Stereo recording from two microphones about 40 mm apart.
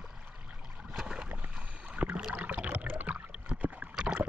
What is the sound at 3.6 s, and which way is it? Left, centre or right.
Rowboat, right.